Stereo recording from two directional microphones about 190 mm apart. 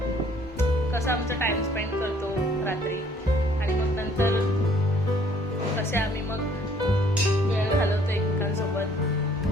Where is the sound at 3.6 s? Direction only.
15° left (ahead or behind).